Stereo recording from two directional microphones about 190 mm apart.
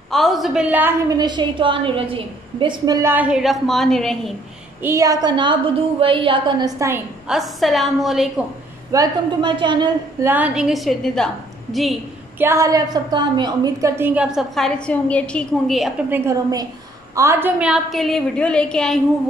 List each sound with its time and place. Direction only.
0.1 s a woman's voice: centre (ahead or behind)
4.8 s a woman's voice: 15° right (ahead or behind)
7.2 s a woman's voice: centre (ahead or behind)
8.9 s a woman's voice: 20° right (ahead or behind)
10.2 s a woman's voice: 10° right (ahead or behind)
12.4 s a woman's voice: 15° right (ahead or behind); by 15.9 s centre (ahead or behind)
16.1 s a woman's voice: 15° right (ahead or behind); by 18.9 s 5° left (ahead or behind)